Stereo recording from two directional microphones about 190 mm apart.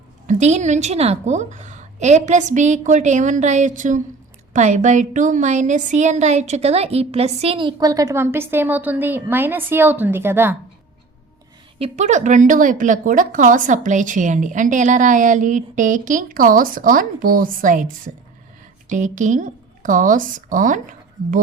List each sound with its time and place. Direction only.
0.3 s a woman's voice: 40° right (ahead or behind); by 10.6 s 10° right (ahead or behind)
11.8 s speech: 35° right (ahead or behind)